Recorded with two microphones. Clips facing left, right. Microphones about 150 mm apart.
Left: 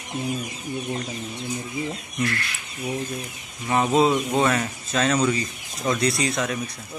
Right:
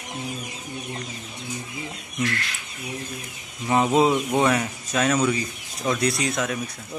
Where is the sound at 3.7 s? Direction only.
15° right (ahead or behind).